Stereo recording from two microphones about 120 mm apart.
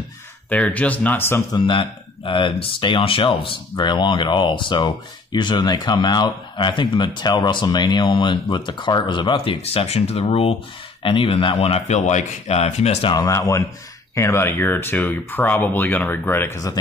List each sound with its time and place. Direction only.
0.5 s speech: 10° left (ahead or behind)
1.7 s speech: 45° left (ahead or behind)
11.5 s speech: 60° left (ahead or behind)
13.1 s speech: 35° left (ahead or behind)